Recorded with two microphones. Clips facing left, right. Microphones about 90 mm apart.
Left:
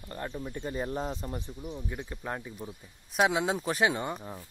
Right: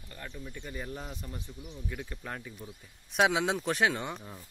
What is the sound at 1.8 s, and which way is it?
Speech, 20° left (ahead or behind).